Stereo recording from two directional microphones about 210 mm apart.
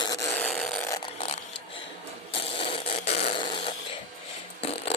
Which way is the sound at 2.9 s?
50° left (ahead or behind).